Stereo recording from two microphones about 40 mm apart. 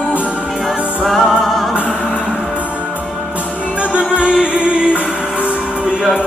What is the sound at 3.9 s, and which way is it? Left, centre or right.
Music, right.